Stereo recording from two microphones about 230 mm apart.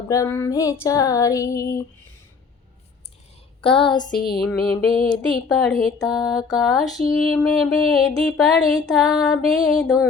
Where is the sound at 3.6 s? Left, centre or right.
Left.